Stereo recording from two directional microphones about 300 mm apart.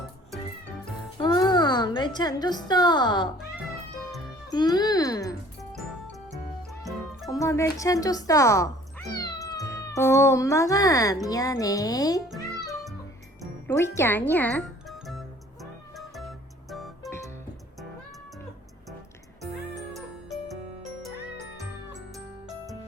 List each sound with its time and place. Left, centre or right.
1.2 s a sound: centre
4.5 s a child's voice: centre
7.3 s speech: centre
13.4 s speech: centre
14.8 s music: centre
19.4 s music: centre